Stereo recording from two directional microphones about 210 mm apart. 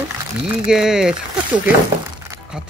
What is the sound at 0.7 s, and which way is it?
Speech, 5° right (ahead or behind).